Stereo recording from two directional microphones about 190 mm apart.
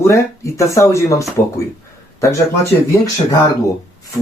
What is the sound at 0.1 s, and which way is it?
Speech, 15° left (ahead or behind).